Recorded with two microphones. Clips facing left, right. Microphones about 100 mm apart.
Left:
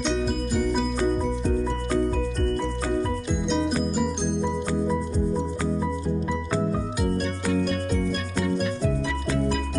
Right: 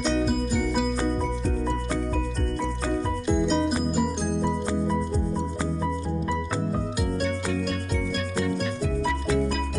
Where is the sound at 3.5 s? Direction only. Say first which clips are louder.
Even; 5° right (ahead or behind).